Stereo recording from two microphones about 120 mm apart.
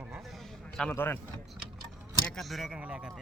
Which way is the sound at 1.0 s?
20° left (ahead or behind).